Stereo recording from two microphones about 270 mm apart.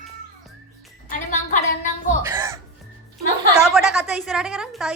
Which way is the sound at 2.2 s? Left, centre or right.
Centre.